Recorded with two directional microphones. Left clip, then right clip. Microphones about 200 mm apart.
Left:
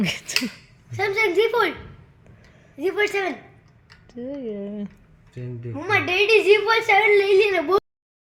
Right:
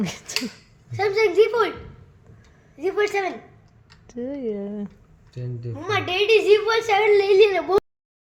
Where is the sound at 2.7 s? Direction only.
50° left (ahead or behind).